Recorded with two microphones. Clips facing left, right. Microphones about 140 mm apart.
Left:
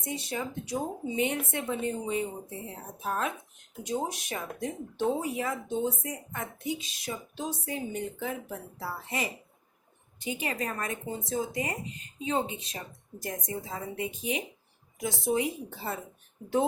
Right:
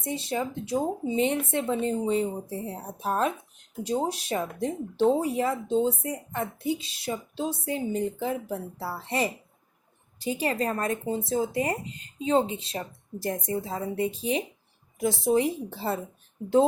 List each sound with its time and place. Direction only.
0.0 s speech: 25° right (ahead or behind)